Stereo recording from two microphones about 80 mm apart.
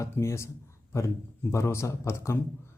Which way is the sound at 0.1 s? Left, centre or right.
Left.